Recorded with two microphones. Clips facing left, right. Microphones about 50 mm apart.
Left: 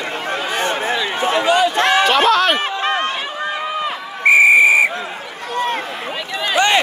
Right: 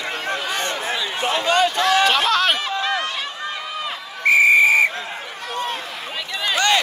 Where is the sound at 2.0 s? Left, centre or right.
Centre.